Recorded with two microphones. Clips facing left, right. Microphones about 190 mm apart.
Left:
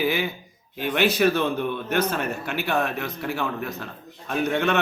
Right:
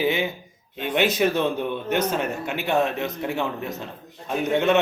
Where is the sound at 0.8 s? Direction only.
20° right (ahead or behind).